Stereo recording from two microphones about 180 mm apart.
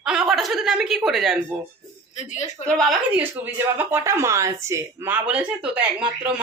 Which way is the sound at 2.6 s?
Centre (ahead or behind).